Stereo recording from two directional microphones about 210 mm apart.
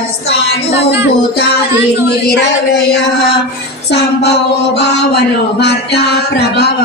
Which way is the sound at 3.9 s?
55° left (ahead or behind).